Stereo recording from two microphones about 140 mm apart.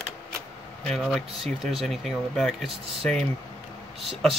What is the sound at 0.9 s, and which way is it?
Speech, centre (ahead or behind).